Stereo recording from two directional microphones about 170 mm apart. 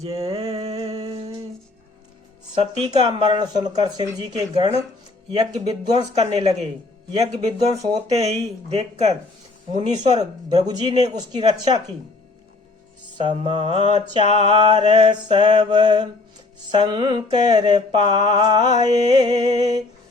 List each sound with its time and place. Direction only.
0.0 s music: 35° right (ahead or behind)
2.6 s mantra: 30° right (ahead or behind)
5.3 s speech: 35° right (ahead or behind)
7.7 s speech: 40° right (ahead or behind)
9.9 s mantra: 25° right (ahead or behind)
13.1 s speech: 30° right (ahead or behind)
14.3 s mantra: 35° right (ahead or behind)